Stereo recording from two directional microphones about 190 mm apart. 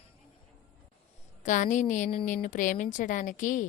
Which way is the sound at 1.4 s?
40° left (ahead or behind).